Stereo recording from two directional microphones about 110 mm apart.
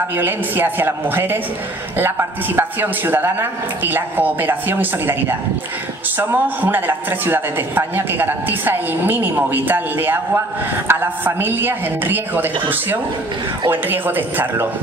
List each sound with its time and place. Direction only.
0.2 s speech: 20° right (ahead or behind)
13.7 s speech: 20° right (ahead or behind)